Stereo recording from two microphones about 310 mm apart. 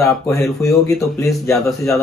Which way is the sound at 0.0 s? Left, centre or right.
Centre.